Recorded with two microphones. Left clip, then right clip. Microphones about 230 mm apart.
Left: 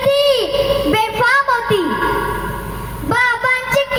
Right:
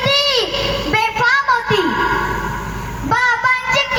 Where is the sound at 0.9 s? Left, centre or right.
Left.